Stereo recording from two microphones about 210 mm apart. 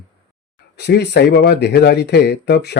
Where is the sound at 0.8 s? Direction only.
55° left (ahead or behind).